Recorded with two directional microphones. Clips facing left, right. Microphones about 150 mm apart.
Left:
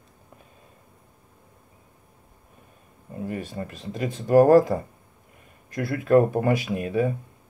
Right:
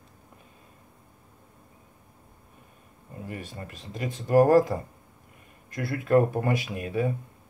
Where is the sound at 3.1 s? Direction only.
25° left (ahead or behind).